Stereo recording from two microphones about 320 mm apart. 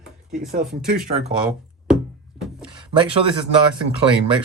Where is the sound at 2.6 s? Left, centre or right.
Centre.